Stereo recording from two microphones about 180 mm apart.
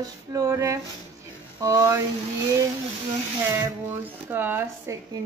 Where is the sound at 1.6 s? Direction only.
15° right (ahead or behind).